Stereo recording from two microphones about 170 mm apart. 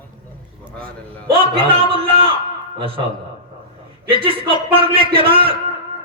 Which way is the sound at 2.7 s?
30° right (ahead or behind).